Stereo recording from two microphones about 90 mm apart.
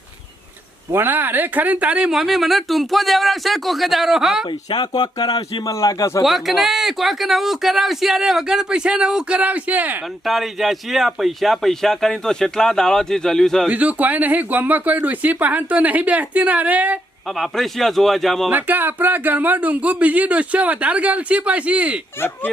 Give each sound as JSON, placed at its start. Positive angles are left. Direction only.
{"t": 0.9, "sound": "speech", "side_deg": -25}
{"t": 4.7, "sound": "speech", "side_deg": 50}
{"t": 5.7, "sound": "a man's voice", "side_deg": 40}
{"t": 6.2, "sound": "speech", "side_deg": 0}
{"t": 10.2, "sound": "speech", "side_deg": 0}
{"t": 13.7, "sound": "speech", "side_deg": -15}
{"t": 17.3, "sound": "speech", "side_deg": 0}
{"t": 18.5, "sound": "speech", "side_deg": -20}